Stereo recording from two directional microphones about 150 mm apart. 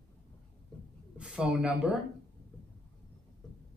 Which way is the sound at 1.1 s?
5° right (ahead or behind).